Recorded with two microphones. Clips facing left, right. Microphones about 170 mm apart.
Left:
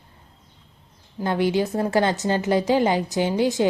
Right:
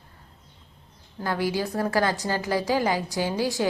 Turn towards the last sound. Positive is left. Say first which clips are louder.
# left 5 dB
turn(degrees=20)  # may be behind; listen again after turning